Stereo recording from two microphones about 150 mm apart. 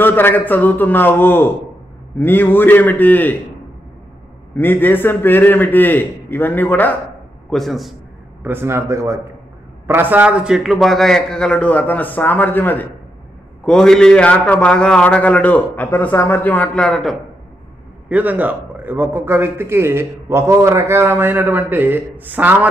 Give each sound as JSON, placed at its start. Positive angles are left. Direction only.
{"t": 0.0, "sound": "a man's voice", "side_deg": 15}
{"t": 4.6, "sound": "a man's voice", "side_deg": 15}
{"t": 7.4, "sound": "a man's voice", "side_deg": 0}
{"t": 8.5, "sound": "a man's voice", "side_deg": -15}
{"t": 18.0, "sound": "a man's voice", "side_deg": -10}